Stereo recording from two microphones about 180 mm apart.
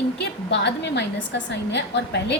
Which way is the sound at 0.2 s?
70° left (ahead or behind).